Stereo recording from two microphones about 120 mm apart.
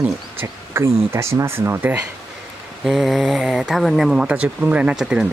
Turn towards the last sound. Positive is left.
turn(degrees=-5)  # may be behind; listen again after turning